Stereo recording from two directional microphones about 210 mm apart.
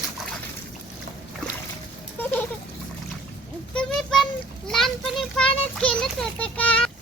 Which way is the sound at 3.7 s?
5° left (ahead or behind).